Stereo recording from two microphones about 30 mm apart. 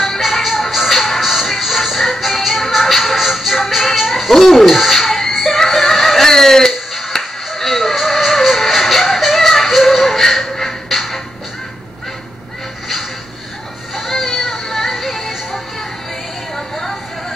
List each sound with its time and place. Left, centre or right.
0.0 s music: centre
13.9 s music: centre
16.5 s a sound: centre